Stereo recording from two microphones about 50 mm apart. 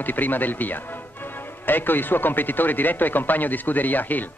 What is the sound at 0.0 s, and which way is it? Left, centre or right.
Speech, left.